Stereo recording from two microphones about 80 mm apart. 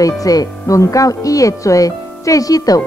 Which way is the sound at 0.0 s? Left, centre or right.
Left.